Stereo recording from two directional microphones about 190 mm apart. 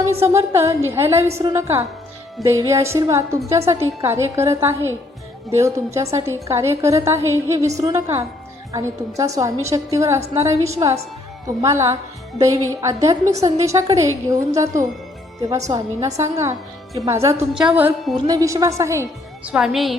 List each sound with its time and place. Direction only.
0.2 s a woman's voice: 15° right (ahead or behind)
18.3 s a woman's voice: 15° right (ahead or behind)
19.5 s a woman's voice: centre (ahead or behind)